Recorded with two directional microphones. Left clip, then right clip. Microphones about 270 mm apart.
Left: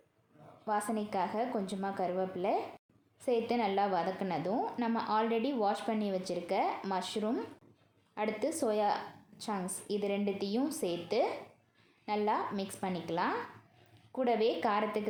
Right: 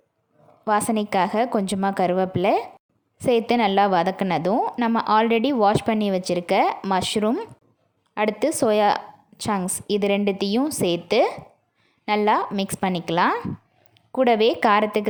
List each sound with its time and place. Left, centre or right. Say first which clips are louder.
0.6 s a woman's voice: right 12 dB; right